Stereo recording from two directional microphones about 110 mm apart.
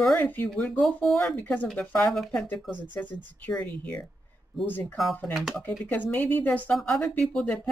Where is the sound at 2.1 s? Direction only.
5° left (ahead or behind).